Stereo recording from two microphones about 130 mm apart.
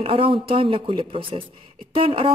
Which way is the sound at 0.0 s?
45° right (ahead or behind).